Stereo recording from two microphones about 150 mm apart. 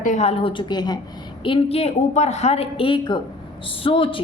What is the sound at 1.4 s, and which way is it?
A woman's voice, 40° left (ahead or behind).